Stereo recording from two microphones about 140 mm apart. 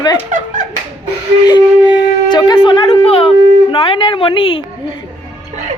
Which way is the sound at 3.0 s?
45° left (ahead or behind).